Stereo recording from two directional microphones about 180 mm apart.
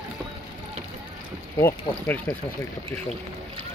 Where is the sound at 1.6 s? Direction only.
10° left (ahead or behind).